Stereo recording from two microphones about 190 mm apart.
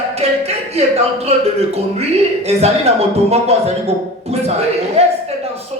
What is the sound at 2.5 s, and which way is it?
A man's voice, 35° right (ahead or behind).